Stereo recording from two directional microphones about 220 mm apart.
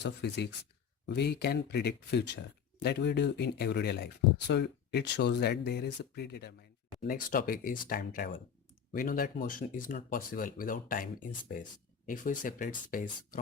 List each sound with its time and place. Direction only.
0.0 s speech: 50° left (ahead or behind)